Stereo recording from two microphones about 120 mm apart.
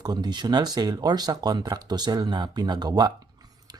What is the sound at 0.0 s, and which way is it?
Speech, 35° right (ahead or behind).